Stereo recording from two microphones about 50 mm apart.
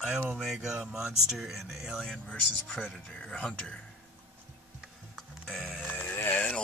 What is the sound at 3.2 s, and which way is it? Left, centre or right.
Speech, centre.